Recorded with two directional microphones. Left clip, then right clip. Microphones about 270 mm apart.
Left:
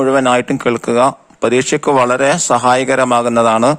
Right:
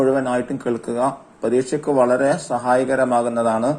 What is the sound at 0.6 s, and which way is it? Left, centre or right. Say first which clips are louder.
A man's voice: left 9 dB; left.